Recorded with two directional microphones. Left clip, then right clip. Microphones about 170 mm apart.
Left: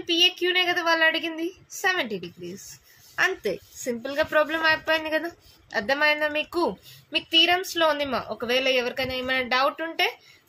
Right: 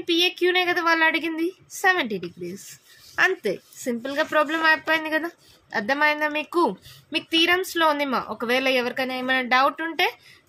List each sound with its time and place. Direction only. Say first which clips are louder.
0.0 s a woman's voice: even; 40° right (ahead or behind)